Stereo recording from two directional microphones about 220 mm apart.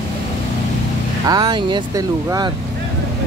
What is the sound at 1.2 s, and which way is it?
Speech, 20° right (ahead or behind).